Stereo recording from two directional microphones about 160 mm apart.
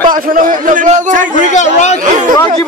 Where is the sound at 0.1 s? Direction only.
60° right (ahead or behind).